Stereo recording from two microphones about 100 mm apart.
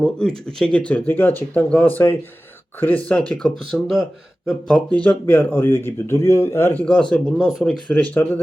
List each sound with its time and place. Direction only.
0.0 s speech: 10° left (ahead or behind)
3.7 s speech: centre (ahead or behind)
4.7 s speech: 15° left (ahead or behind)
6.8 s speech: 10° left (ahead or behind)
7.9 s speech: 15° left (ahead or behind)